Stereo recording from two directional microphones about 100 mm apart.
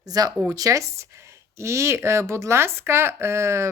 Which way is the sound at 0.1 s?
40° right (ahead or behind).